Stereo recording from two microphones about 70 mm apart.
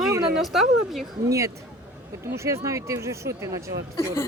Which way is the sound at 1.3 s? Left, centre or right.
Right.